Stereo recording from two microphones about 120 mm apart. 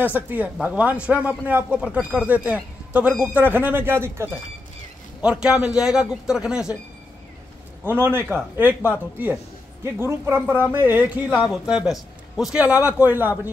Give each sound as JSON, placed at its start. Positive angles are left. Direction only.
{"t": 0.0, "sound": "speech", "side_deg": -15}
{"t": 5.2, "sound": "speech", "side_deg": -5}
{"t": 7.8, "sound": "speech", "side_deg": -20}
{"t": 11.3, "sound": "speech", "side_deg": -5}